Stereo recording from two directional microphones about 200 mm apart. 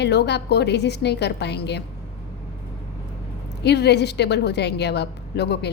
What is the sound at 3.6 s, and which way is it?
A woman's voice, 55° left (ahead or behind).